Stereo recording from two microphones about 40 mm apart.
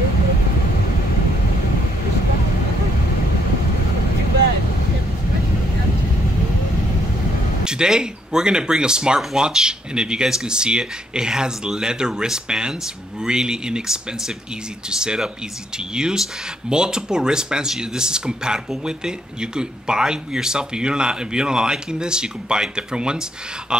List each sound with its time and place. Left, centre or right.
7.6 s speech: centre